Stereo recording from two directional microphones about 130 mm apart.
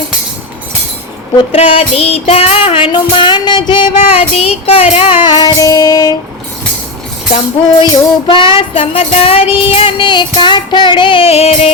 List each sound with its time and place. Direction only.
1.5 s music: 50° left (ahead or behind); by 4.2 s 35° left (ahead or behind)
4.2 s music: 50° left (ahead or behind); by 6.1 s 30° left (ahead or behind)
7.8 s music: 35° left (ahead or behind)